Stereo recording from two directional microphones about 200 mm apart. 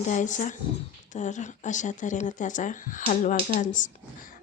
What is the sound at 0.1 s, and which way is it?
A woman's voice, 40° left (ahead or behind).